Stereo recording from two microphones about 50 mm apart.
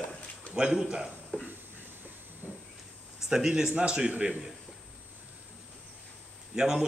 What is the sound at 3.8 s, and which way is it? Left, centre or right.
Speech, right.